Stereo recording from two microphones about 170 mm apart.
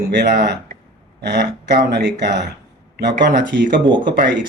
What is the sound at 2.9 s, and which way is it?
Speech, 90° right.